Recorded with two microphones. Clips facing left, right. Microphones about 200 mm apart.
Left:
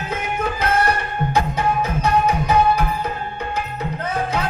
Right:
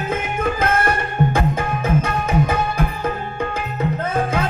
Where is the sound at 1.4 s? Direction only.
50° right (ahead or behind).